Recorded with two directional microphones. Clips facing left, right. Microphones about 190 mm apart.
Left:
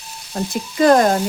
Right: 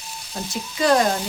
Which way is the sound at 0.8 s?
50° left (ahead or behind).